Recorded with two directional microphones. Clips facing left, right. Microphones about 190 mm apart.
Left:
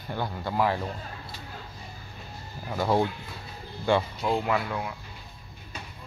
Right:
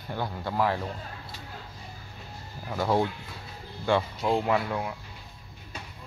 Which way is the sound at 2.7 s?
5° left (ahead or behind).